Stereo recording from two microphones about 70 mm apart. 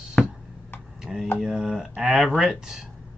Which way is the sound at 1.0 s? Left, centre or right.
Centre.